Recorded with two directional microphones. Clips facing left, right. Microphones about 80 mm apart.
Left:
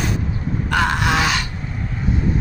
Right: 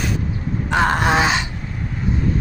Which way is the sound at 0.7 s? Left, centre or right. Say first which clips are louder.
Right 2 dB; right.